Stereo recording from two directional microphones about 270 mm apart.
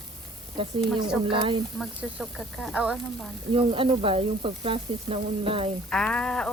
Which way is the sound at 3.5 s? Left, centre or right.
Centre.